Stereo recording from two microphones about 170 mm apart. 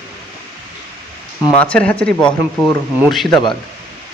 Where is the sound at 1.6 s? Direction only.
5° left (ahead or behind).